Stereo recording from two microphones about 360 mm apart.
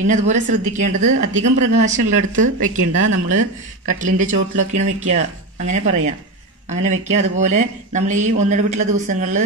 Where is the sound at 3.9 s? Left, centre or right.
Right.